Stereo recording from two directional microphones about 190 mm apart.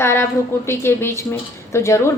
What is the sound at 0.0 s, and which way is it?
A woman's voice, 15° left (ahead or behind).